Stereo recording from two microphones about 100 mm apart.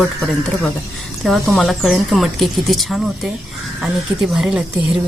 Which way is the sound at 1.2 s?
Centre (ahead or behind).